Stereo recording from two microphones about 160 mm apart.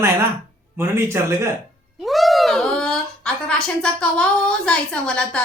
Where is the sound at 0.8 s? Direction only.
15° right (ahead or behind).